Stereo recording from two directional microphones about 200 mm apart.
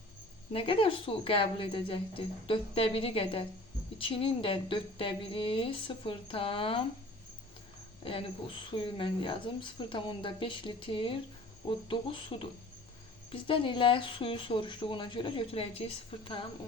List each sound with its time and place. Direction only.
0.5 s speech: 25° left (ahead or behind)
8.7 s speech: 25° left (ahead or behind)